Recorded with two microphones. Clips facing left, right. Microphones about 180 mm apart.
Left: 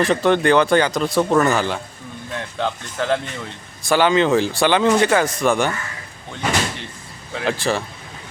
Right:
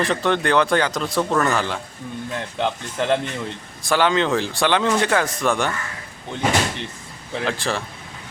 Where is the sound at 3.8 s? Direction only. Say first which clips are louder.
Left 3 dB; centre (ahead or behind).